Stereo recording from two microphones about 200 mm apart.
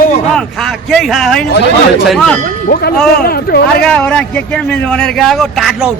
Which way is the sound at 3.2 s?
50° left (ahead or behind).